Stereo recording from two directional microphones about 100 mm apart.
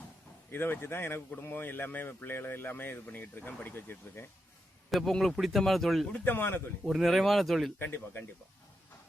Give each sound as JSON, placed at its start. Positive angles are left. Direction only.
{"t": 0.5, "sound": "speech", "side_deg": 20}
{"t": 4.9, "sound": "speech", "side_deg": 0}
{"t": 6.1, "sound": "speech", "side_deg": 20}
{"t": 6.8, "sound": "speech", "side_deg": 0}
{"t": 7.8, "sound": "speech", "side_deg": 20}